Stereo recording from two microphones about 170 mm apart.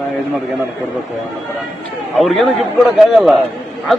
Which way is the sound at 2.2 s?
Centre (ahead or behind).